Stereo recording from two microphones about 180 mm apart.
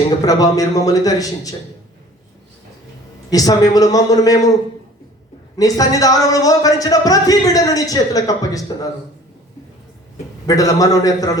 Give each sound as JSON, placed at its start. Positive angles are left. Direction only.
{"t": 0.3, "sound": "speech", "side_deg": 20}
{"t": 3.2, "sound": "speech", "side_deg": 20}
{"t": 5.5, "sound": "speech", "side_deg": 20}
{"t": 10.4, "sound": "speech", "side_deg": 20}